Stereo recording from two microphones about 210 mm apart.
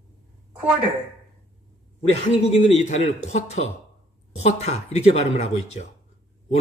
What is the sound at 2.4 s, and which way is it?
Speech, 30° left (ahead or behind).